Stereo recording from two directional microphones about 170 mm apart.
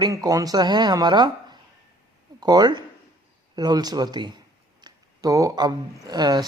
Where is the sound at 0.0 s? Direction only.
20° right (ahead or behind).